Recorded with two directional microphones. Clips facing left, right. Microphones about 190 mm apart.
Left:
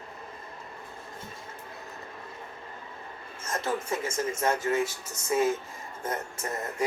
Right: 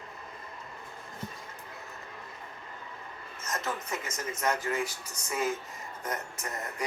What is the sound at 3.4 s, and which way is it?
Speech, 30° left (ahead or behind).